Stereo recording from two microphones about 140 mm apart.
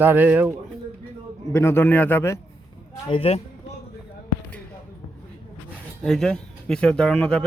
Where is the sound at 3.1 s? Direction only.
45° left (ahead or behind).